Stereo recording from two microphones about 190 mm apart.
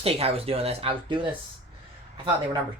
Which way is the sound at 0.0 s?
30° right (ahead or behind).